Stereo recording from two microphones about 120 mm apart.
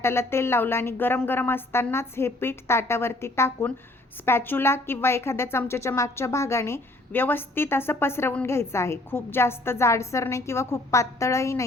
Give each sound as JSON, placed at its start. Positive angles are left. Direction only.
{"t": 0.0, "sound": "a woman's voice", "side_deg": 20}